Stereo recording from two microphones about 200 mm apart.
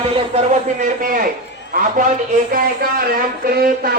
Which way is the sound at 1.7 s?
45° right (ahead or behind).